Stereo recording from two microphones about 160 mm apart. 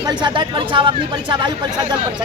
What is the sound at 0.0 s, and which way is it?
Speech, 25° right (ahead or behind).